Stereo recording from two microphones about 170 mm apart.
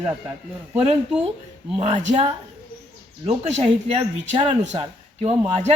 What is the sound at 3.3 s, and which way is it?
Speech, 40° right (ahead or behind).